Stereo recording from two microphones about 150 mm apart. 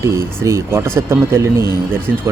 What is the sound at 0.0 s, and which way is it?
Speech, 20° right (ahead or behind).